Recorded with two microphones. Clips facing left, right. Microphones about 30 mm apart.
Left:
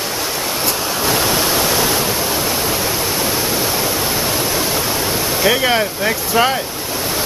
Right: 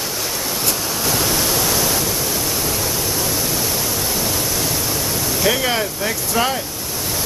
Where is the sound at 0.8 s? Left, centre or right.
Left.